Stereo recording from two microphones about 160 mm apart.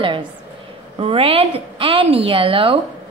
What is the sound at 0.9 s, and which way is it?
A woman's voice, 35° right (ahead or behind).